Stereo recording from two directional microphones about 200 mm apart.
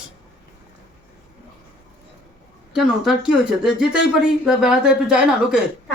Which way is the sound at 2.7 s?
Centre (ahead or behind).